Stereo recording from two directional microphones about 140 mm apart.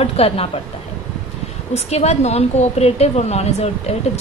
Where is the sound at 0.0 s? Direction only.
45° left (ahead or behind).